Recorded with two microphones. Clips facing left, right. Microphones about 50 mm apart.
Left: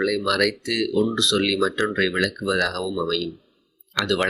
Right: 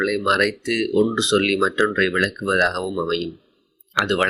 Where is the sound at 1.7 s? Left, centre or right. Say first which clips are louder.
Right 4 dB; centre.